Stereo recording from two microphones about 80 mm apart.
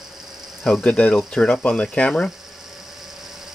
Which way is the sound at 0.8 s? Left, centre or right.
Centre.